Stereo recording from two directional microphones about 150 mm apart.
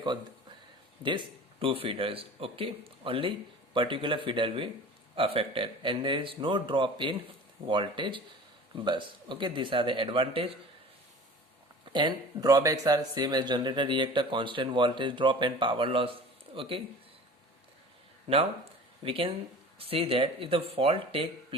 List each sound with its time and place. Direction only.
1.0 s speech: 35° right (ahead or behind)
11.9 s speech: 30° right (ahead or behind)
19.0 s speech: 35° right (ahead or behind)